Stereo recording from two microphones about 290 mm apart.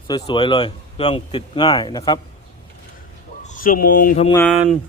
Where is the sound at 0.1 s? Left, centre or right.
Centre.